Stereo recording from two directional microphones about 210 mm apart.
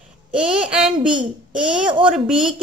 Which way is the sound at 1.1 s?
20° right (ahead or behind).